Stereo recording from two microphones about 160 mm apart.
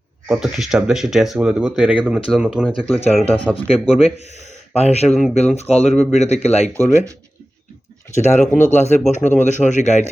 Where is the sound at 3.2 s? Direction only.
35° left (ahead or behind).